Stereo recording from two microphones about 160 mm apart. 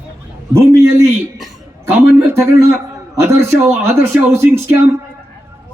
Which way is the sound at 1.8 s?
15° right (ahead or behind).